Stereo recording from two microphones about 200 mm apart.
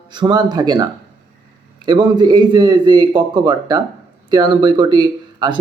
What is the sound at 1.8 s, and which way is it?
Speech, 20° right (ahead or behind).